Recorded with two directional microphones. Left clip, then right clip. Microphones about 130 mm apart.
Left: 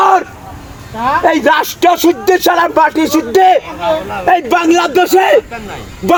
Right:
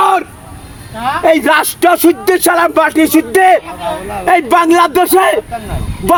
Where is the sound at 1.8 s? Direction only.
80° right.